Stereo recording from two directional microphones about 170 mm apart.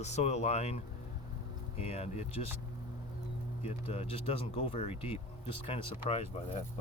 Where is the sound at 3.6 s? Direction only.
35° left (ahead or behind).